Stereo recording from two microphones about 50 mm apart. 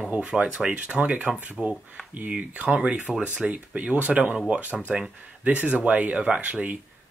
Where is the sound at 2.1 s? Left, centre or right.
Right.